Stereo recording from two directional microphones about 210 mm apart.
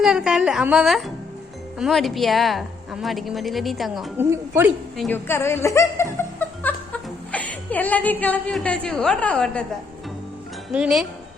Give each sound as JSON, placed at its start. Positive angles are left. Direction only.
{"t": 0.0, "sound": "a woman's voice", "side_deg": -5}
{"t": 4.3, "sound": "a woman's voice", "side_deg": -10}
{"t": 4.9, "sound": "a woman's voice", "side_deg": 10}
{"t": 10.7, "sound": "a woman's voice", "side_deg": 0}